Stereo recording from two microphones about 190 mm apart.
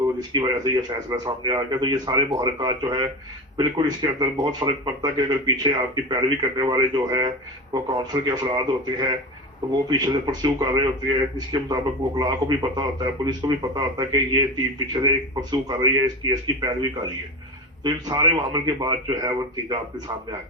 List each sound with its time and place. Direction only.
0.2 s a man's voice: 20° right (ahead or behind)
17.8 s a man's voice: 20° right (ahead or behind)